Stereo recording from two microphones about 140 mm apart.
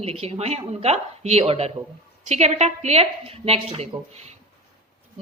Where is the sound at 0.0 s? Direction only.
45° right (ahead or behind).